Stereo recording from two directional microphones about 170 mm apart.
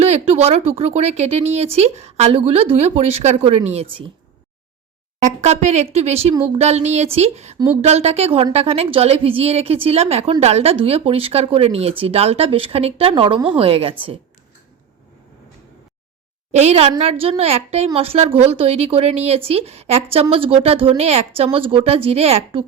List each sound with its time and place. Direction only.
0.0 s speech: 40° right (ahead or behind)
5.2 s speech: 40° right (ahead or behind)
16.5 s a woman's voice: 40° right (ahead or behind)